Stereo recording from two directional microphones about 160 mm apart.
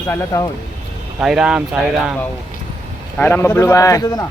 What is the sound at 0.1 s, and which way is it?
Speech, 20° left (ahead or behind).